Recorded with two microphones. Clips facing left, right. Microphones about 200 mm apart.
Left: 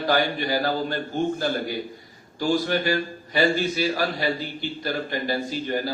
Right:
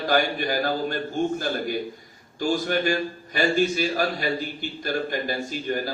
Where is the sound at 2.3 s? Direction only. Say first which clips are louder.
Left 1 dB; 50° right (ahead or behind).